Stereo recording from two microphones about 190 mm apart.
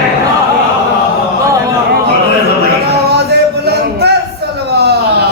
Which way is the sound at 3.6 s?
60° right (ahead or behind).